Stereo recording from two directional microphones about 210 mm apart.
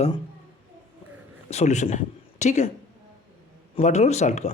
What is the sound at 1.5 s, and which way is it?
A woman's voice, 30° left (ahead or behind).